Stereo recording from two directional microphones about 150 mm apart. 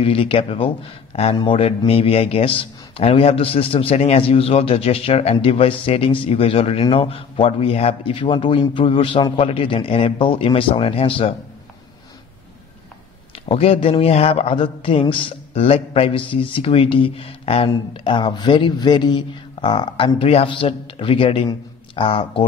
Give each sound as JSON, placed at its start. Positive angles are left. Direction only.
{"t": 0.0, "sound": "a man's voice", "side_deg": 35}
{"t": 13.3, "sound": "a man's voice", "side_deg": 40}